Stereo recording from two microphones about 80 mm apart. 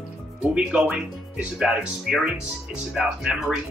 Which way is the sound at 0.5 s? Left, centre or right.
Centre.